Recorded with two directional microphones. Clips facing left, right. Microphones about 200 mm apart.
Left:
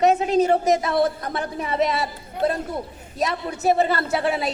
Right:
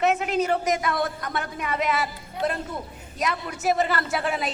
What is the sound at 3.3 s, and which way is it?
A woman's voice, 30° left (ahead or behind).